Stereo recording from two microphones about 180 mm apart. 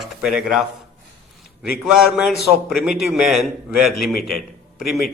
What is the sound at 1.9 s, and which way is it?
A man's voice, 5° right (ahead or behind).